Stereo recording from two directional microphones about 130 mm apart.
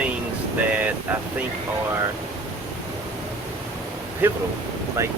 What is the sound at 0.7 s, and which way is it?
Air conditioning, 10° right (ahead or behind).